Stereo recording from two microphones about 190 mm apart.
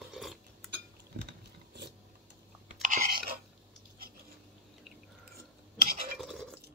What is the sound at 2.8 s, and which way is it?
Chewing, 45° right (ahead or behind).